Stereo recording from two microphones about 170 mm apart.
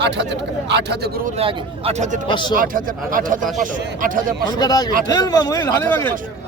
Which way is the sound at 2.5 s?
55° right (ahead or behind).